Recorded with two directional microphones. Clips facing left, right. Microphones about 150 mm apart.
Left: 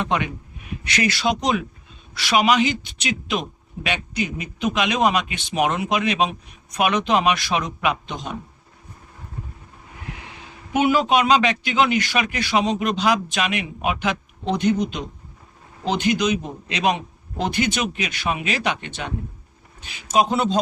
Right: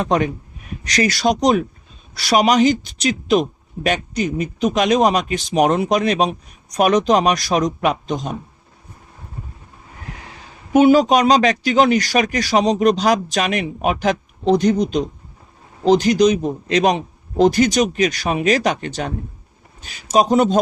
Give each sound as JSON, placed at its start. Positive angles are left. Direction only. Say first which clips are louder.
{"t": 0.0, "sound": "a man's voice", "louder": "right 5 dB", "side_deg": -40}
{"t": 10.7, "sound": "a man's voice", "louder": "right 7 dB", "side_deg": -40}